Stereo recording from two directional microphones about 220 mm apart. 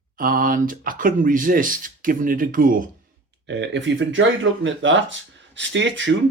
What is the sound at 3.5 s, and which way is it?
Speech, 55° right (ahead or behind).